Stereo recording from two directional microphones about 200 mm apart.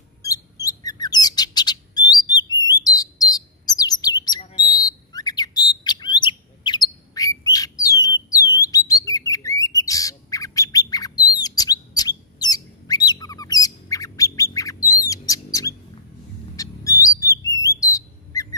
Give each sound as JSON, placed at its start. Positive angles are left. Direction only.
{"t": 0.2, "sound": "bird", "side_deg": 15}
{"t": 12.4, "sound": "squawk", "side_deg": 20}
{"t": 16.5, "sound": "whistle", "side_deg": 15}